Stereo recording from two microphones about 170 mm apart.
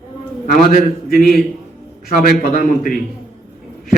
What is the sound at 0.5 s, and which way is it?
A man's voice, 55° left (ahead or behind).